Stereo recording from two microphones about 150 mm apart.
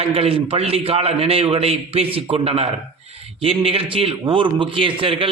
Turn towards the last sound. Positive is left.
turn(degrees=-35)  # may be behind; listen again after turning